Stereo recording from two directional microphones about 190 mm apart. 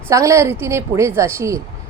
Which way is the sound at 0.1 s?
15° right (ahead or behind).